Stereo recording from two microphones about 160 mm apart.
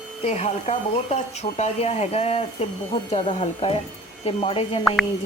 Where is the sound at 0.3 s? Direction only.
45° left (ahead or behind).